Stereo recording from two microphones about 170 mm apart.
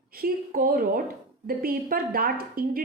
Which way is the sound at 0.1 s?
60° right (ahead or behind).